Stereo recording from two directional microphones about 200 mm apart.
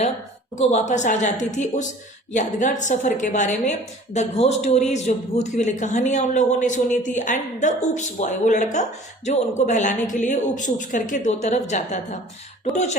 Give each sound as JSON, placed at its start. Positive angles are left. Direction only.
{"t": 0.5, "sound": "a man's voice", "side_deg": 35}